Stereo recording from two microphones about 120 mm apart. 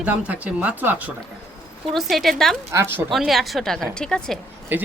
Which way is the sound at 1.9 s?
Centre (ahead or behind).